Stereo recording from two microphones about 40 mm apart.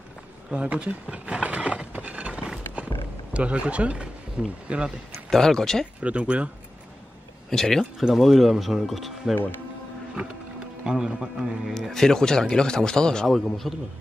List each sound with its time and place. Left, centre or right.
0.5 s speech: right
1.9 s a sound: right
3.3 s speech: right
5.3 s a man's voice: centre
5.9 s speech: right
7.4 s speech: centre
8.0 s speech: centre
10.1 s music: right
11.1 s a man's voice: centre
11.9 s a man's voice: centre
13.3 s speech: centre